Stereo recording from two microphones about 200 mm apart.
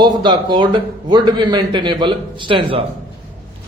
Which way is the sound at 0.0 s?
20° right (ahead or behind).